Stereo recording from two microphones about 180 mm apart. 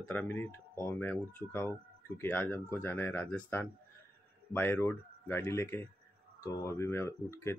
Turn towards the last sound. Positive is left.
turn(degrees=15)  # may be behind; listen again after turning